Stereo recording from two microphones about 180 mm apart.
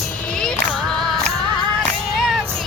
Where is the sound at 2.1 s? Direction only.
Centre (ahead or behind).